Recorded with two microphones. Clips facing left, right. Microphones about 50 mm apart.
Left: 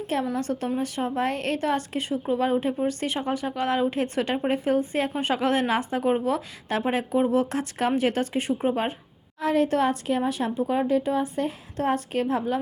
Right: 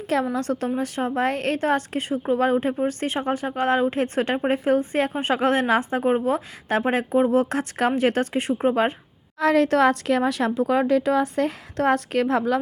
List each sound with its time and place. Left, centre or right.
0.3 s a woman's voice: right
8.7 s a woman's voice: right
9.4 s a woman's voice: right